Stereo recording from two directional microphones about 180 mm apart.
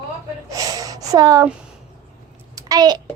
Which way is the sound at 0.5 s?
20° right (ahead or behind).